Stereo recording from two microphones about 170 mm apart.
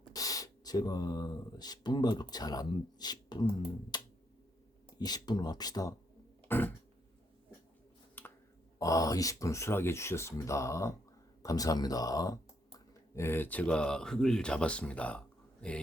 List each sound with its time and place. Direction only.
0.1 s speech: 20° left (ahead or behind)
3.9 s music: 25° left (ahead or behind)
4.9 s speech: 25° left (ahead or behind)
6.5 s a sound: 10° left (ahead or behind)
8.2 s finger snapping: 10° left (ahead or behind)
8.8 s speech: 20° left (ahead or behind)